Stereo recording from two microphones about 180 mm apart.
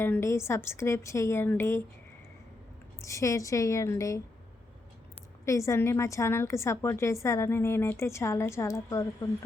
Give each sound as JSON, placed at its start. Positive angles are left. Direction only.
{"t": 0.0, "sound": "a woman's voice", "side_deg": 15}
{"t": 3.0, "sound": "a woman's voice", "side_deg": 15}
{"t": 5.5, "sound": "a woman's voice", "side_deg": 15}